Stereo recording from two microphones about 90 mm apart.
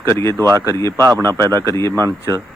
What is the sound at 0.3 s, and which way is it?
Speech, 40° right (ahead or behind).